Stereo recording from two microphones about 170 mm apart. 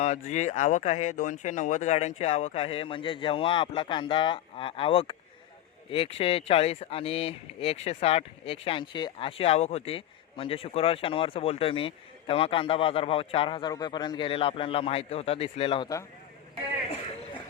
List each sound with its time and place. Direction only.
0.0 s speech: 40° left (ahead or behind)